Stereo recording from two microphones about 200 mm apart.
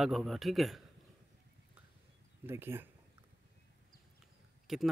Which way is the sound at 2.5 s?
10° right (ahead or behind).